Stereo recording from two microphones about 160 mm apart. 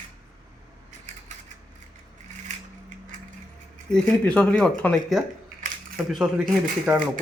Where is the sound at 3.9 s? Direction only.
5° left (ahead or behind); by 7.0 s 10° right (ahead or behind).